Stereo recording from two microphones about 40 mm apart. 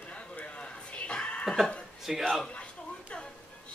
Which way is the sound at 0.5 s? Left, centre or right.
Left.